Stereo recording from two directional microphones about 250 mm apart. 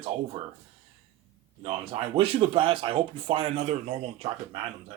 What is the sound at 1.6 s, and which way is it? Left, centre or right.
Speech, right.